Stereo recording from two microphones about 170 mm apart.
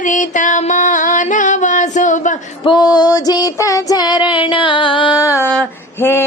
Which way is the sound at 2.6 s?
25° left (ahead or behind).